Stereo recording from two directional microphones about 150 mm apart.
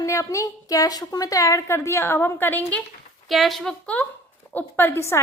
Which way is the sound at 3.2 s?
Centre (ahead or behind).